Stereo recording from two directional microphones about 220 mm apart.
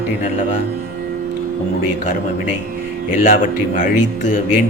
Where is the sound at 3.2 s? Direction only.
35° left (ahead or behind).